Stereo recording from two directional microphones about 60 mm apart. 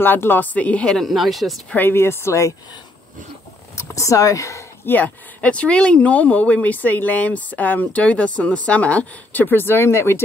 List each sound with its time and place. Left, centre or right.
0.0 s speech: left
0.9 s speech: centre
1.8 s speech: left
3.7 s speech: left
4.8 s speech: left